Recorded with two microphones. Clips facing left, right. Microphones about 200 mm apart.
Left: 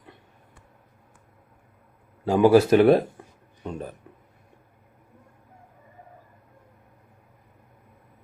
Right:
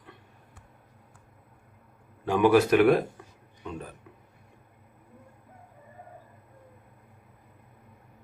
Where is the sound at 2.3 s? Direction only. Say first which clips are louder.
Left 4 dB; 30° left (ahead or behind).